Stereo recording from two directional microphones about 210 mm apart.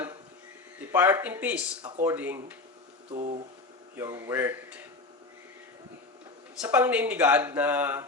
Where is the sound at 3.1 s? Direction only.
30° right (ahead or behind).